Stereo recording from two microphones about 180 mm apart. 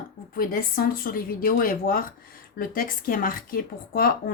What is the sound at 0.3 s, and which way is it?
Speech, 55° left (ahead or behind).